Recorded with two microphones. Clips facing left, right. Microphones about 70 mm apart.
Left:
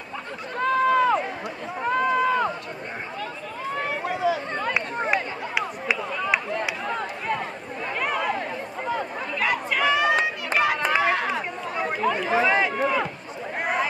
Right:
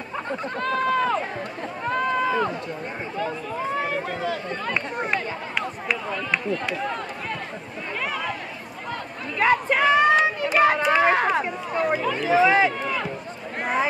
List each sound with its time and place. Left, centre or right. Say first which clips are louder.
0.6 s run: left 3 dB; centre
3.7 s run: right 1 dB; centre
4.0 s run: left 3 dB; centre
6.6 s a sound: even; centre
9.4 s a sound: right 5 dB; right
11.0 s run: right 4 dB; right
11.7 s chatter: right 2 dB; centre
12.1 s a sound: right 2 dB; centre
12.8 s run: left 4 dB; centre